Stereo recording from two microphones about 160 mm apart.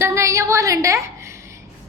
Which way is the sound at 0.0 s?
20° right (ahead or behind).